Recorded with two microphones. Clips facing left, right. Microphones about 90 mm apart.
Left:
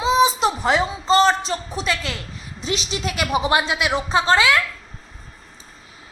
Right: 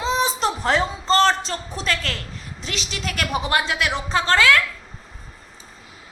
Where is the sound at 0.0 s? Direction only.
5° left (ahead or behind).